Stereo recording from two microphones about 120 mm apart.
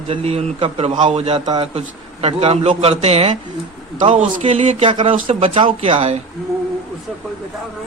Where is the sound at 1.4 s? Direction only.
40° right (ahead or behind).